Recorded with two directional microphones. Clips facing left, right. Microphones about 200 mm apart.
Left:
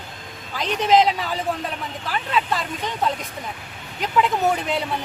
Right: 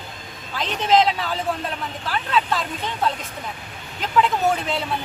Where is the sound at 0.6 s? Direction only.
10° left (ahead or behind).